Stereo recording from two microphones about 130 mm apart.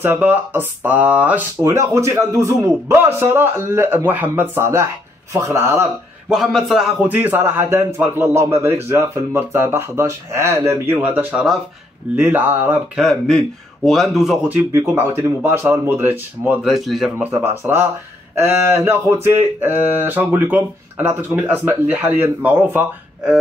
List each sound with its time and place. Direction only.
0.0 s a man's voice: 15° right (ahead or behind)
1.6 s a man's voice: 20° right (ahead or behind)
6.2 s a man's voice: 5° right (ahead or behind)
14.5 s a man's voice: 15° right (ahead or behind)
16.6 s speech: centre (ahead or behind)
17.2 s a man's voice: 15° right (ahead or behind)